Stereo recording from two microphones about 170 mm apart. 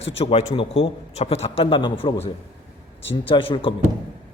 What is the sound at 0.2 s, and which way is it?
A man's voice, 35° left (ahead or behind).